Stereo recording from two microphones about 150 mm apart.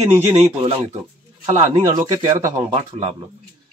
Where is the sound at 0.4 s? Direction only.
35° right (ahead or behind).